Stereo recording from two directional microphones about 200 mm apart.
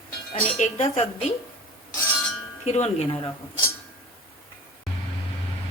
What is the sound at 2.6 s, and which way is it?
Speech, 35° left (ahead or behind).